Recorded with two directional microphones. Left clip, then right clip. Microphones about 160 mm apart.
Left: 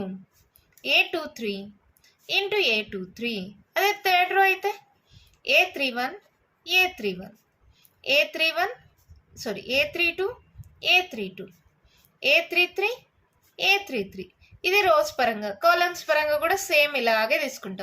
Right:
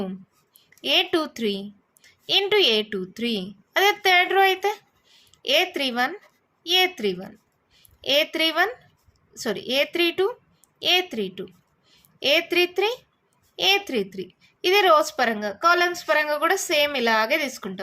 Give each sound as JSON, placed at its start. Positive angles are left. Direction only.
{"t": 0.8, "sound": "a woman's voice", "side_deg": -45}